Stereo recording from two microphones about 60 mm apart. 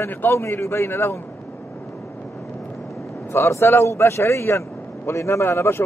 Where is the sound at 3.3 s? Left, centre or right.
Left.